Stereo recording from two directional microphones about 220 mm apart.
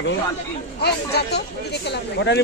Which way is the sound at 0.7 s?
50° left (ahead or behind).